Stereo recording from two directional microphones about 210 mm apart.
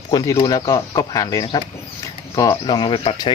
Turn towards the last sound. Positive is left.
turn(degrees=25)  # may be behind; listen again after turning